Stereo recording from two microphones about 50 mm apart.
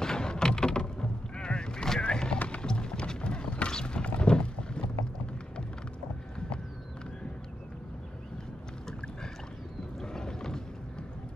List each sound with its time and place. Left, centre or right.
0.0 s boat: centre
2.3 s music: left
2.6 s music: centre
4.2 s boat: centre
9.9 s boat: centre